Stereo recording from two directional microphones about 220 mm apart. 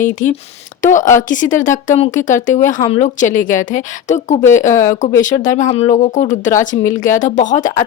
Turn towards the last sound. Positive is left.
turn(degrees=35)  # may be behind; listen again after turning